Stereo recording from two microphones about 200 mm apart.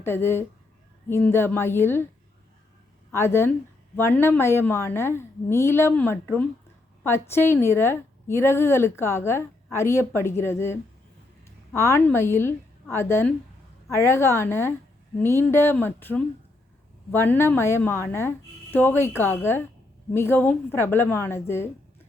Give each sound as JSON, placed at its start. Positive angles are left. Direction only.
{"t": 0.0, "sound": "a woman's voice", "side_deg": 10}
{"t": 3.1, "sound": "a woman's voice", "side_deg": 15}